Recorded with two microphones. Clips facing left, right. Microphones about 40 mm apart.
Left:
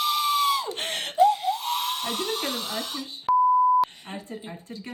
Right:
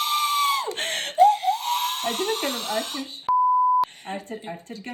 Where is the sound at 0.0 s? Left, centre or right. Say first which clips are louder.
Right 1 dB; right.